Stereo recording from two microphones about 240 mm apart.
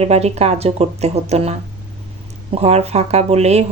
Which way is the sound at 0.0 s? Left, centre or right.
Right.